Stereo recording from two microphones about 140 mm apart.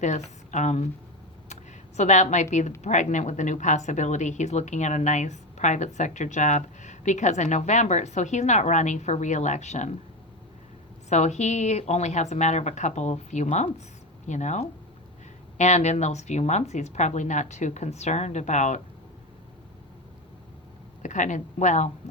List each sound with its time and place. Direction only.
0.0 s speech: 60° left (ahead or behind)
2.0 s speech: 60° left (ahead or behind)
11.1 s speech: 55° left (ahead or behind)
21.0 s speech: 60° left (ahead or behind)